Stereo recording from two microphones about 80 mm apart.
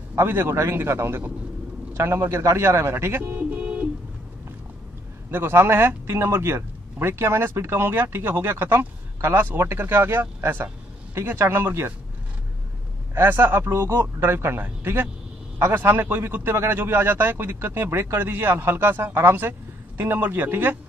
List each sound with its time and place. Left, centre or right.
0.1 s a man's voice: right
5.3 s a man's voice: right
13.1 s speech: right